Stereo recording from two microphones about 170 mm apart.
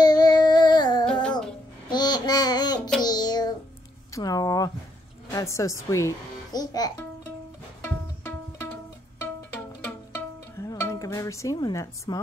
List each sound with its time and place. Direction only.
0.0 s a sound: 25° left (ahead or behind)
1.9 s babbling: 25° left (ahead or behind)
3.0 s child singing: 25° left (ahead or behind)
4.1 s a sound: 20° left (ahead or behind)
5.3 s speech: 15° left (ahead or behind)
7.8 s music: 15° left (ahead or behind)
9.8 s music: 15° left (ahead or behind)